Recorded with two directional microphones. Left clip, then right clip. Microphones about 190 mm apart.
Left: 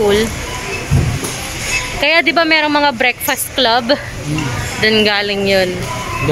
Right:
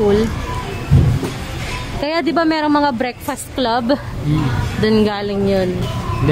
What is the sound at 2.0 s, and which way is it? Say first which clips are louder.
Speech: left 5 dB; 20° right (ahead or behind).